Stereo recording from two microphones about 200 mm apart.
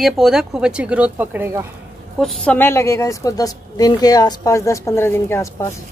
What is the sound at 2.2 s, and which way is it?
A woman's voice, 5° left (ahead or behind).